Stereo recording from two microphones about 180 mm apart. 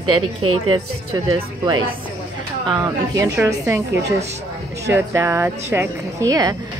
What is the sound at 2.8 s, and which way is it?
Speech, 15° right (ahead or behind).